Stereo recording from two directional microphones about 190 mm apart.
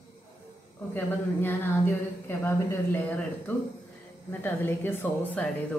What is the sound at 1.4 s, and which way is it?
A woman's voice, 10° left (ahead or behind).